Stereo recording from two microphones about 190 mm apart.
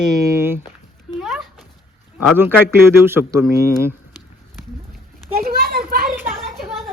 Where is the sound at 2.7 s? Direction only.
10° right (ahead or behind).